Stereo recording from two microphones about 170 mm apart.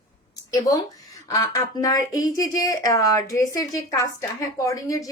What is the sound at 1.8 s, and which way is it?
A woman's voice, 20° left (ahead or behind).